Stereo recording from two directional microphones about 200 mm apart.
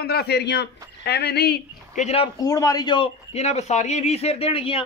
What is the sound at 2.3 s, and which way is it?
A man's voice, 15° left (ahead or behind).